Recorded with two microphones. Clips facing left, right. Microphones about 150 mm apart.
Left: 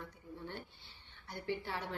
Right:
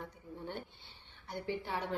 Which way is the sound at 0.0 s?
15° right (ahead or behind).